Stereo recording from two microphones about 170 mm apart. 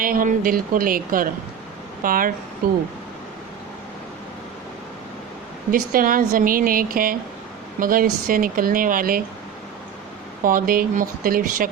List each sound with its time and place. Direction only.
0.0 s speech: 55° right (ahead or behind)
5.7 s speech: 55° right (ahead or behind)
10.4 s speech: 55° right (ahead or behind)